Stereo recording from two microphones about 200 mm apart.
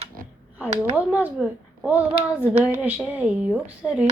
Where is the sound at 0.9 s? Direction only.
10° right (ahead or behind).